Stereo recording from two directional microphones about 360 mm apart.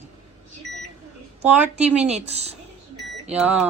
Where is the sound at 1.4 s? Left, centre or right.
Centre.